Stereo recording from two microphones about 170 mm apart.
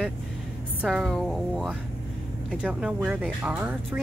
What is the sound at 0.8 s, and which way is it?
Speech, centre (ahead or behind).